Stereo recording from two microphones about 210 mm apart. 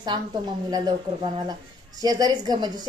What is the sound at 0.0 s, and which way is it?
A woman's voice, 20° right (ahead or behind).